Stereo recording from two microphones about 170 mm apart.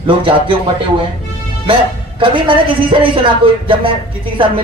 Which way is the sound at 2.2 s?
30° right (ahead or behind).